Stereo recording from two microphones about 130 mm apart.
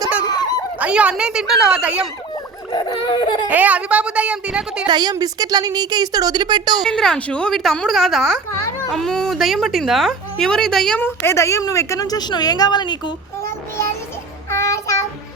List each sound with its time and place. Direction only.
0.3 s a sound: 30° left (ahead or behind)
0.8 s speech: 10° right (ahead or behind)
2.3 s a sound: 30° left (ahead or behind)
3.5 s speech: 10° right (ahead or behind)
4.9 s speech: 35° right (ahead or behind)
6.8 s a woman's voice: 5° left (ahead or behind)
11.0 s a woman's voice: 20° left (ahead or behind); by 13.1 s 35° left (ahead or behind)
14.5 s child singing: 20° left (ahead or behind)